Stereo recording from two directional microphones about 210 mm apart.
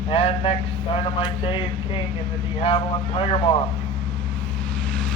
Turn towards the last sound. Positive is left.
turn(degrees=25)  # may be behind; listen again after turning